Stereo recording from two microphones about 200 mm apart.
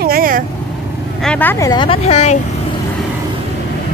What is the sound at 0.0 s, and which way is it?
Vehicle, 45° right (ahead or behind).